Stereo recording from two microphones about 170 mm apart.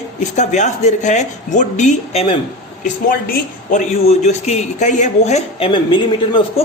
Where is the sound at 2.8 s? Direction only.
60° left (ahead or behind).